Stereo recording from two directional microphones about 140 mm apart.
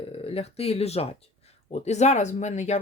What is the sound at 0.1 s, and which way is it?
Speech, 45° left (ahead or behind).